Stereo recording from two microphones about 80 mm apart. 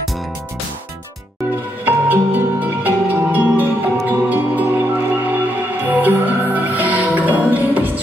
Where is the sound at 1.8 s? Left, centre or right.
Right.